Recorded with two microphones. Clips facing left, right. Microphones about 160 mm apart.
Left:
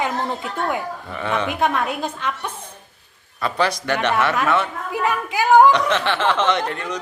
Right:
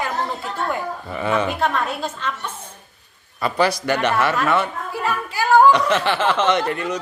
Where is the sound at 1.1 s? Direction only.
5° right (ahead or behind).